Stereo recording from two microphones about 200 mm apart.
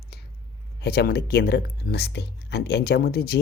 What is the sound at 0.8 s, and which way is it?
Speech, 50° left (ahead or behind).